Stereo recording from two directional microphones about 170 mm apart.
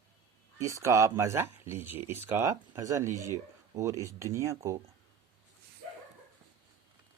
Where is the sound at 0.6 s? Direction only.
20° right (ahead or behind).